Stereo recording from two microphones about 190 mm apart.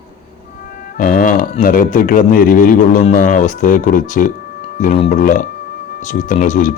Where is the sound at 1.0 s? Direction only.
45° left (ahead or behind).